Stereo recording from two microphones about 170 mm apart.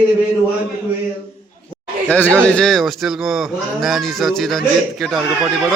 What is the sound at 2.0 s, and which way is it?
A man's voice, 10° left (ahead or behind).